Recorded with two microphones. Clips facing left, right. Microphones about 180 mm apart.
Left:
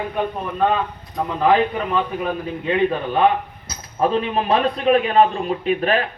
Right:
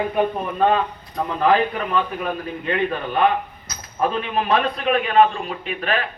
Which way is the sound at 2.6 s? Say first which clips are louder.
Left 4 dB; 15° left (ahead or behind).